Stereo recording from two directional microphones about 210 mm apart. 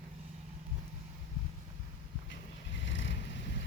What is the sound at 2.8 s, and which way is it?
Vehicle, 60° left (ahead or behind).